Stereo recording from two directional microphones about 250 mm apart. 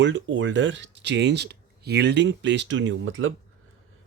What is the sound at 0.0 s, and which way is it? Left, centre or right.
Speech, right.